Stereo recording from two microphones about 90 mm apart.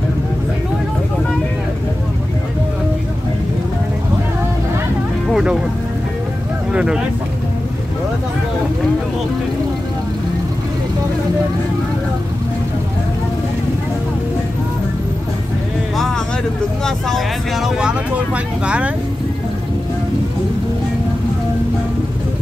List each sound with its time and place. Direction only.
5.3 s music: 10° right (ahead or behind)
6.7 s vehicle: 10° right (ahead or behind)
16.8 s vehicle: 5° left (ahead or behind)
17.7 s vehicle: 10° right (ahead or behind)